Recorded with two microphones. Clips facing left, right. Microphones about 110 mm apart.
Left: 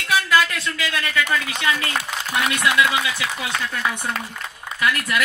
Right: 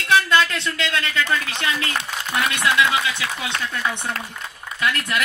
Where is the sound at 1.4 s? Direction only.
20° left (ahead or behind).